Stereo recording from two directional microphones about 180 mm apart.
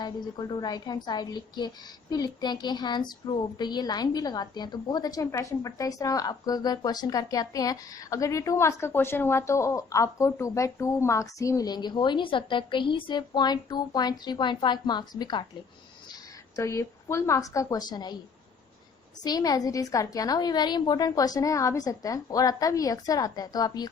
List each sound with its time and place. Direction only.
0.0 s a woman's voice: 20° left (ahead or behind)
16.6 s a woman's voice: 15° left (ahead or behind)
19.2 s a woman's voice: 20° left (ahead or behind)